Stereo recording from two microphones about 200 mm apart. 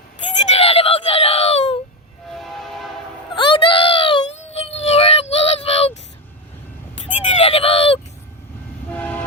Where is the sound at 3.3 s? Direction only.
25° left (ahead or behind).